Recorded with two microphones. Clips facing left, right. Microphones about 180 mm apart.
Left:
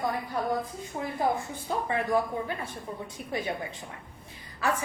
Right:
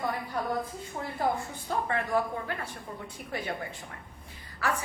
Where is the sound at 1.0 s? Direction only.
15° left (ahead or behind).